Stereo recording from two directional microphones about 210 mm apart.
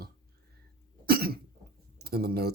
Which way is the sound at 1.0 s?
45° right (ahead or behind).